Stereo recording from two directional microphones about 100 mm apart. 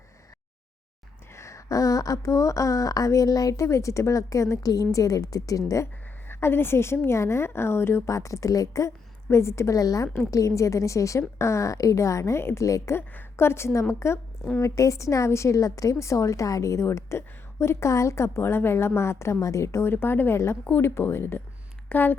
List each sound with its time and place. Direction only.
1.4 s speech: 30° left (ahead or behind)
6.2 s a woman's voice: 25° left (ahead or behind)